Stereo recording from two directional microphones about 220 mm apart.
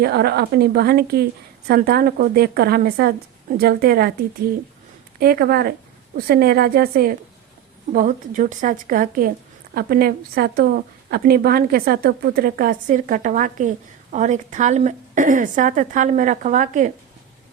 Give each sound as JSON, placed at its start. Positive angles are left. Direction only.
{"t": 0.0, "sound": "a woman's voice", "side_deg": -45}
{"t": 5.2, "sound": "a woman's voice", "side_deg": -45}